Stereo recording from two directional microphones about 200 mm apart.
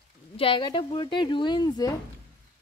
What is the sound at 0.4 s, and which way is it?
Speech, 25° left (ahead or behind).